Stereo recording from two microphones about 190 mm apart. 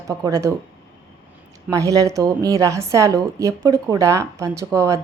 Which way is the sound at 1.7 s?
20° right (ahead or behind).